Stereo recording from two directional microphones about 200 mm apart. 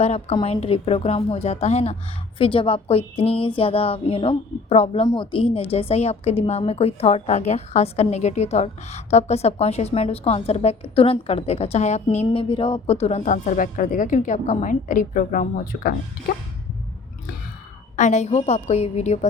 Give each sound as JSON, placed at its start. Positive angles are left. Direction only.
{"t": 0.0, "sound": "a woman's voice", "side_deg": 30}
{"t": 17.9, "sound": "a woman's voice", "side_deg": 35}